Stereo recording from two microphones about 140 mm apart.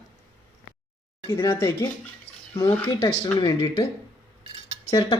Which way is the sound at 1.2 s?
20° left (ahead or behind).